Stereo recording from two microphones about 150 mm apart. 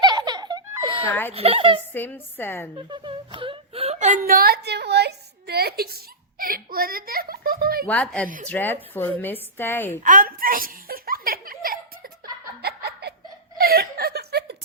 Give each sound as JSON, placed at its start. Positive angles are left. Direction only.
{"t": 0.0, "sound": "giggle", "side_deg": -30}
{"t": 1.3, "sound": "speech", "side_deg": -40}
{"t": 1.9, "sound": "a woman's voice", "side_deg": 15}
{"t": 2.7, "sound": "speech", "side_deg": -30}
{"t": 6.4, "sound": "a child's voice", "side_deg": -75}
{"t": 7.9, "sound": "a woman's voice", "side_deg": 5}
{"t": 10.0, "sound": "laughter", "side_deg": -65}
{"t": 12.6, "sound": "laughter", "side_deg": -90}
{"t": 13.6, "sound": "chuckle", "side_deg": -90}